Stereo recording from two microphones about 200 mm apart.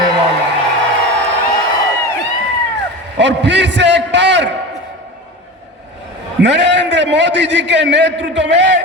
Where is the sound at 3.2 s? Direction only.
60° right (ahead or behind).